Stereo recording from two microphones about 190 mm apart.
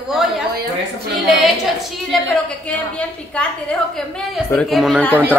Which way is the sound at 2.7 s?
5° left (ahead or behind).